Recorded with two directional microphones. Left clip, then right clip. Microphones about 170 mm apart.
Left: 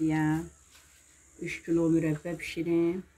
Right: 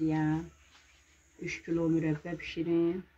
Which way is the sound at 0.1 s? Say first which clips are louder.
Left 3 dB; 5° right (ahead or behind).